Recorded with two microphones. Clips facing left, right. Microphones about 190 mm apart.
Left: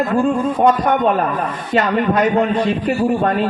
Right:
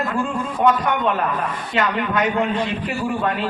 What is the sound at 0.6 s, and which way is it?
A man's voice, 40° left (ahead or behind).